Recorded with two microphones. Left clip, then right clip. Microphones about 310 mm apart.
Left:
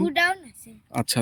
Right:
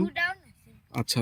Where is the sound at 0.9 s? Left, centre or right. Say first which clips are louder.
Left 4 dB; centre.